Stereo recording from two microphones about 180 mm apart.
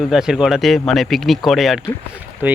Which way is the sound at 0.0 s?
5° right (ahead or behind).